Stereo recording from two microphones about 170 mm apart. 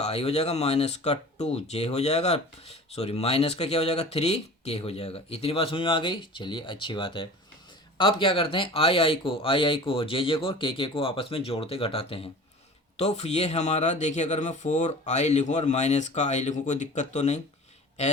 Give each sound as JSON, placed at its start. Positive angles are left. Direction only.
{"t": 0.0, "sound": "speech", "side_deg": 35}